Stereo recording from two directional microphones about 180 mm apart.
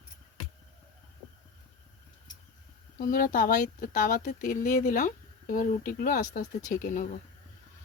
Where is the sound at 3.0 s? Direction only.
50° left (ahead or behind).